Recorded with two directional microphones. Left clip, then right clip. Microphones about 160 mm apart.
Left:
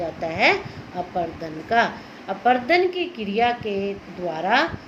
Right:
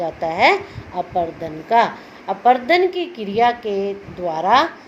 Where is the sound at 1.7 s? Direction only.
30° right (ahead or behind).